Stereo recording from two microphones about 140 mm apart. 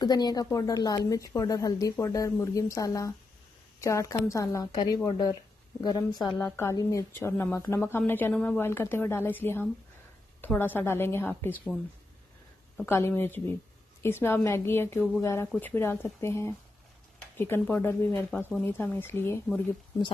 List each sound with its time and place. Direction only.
0.0 s a woman's voice: 30° left (ahead or behind)
6.4 s speech: 15° left (ahead or behind)
12.8 s speech: 15° left (ahead or behind)